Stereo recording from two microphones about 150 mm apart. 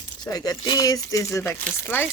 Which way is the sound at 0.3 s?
25° left (ahead or behind).